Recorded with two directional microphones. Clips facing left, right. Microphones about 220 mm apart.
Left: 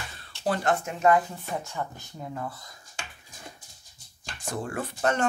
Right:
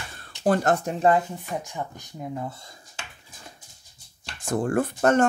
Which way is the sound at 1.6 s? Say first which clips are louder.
Right 1 dB; 15° right (ahead or behind).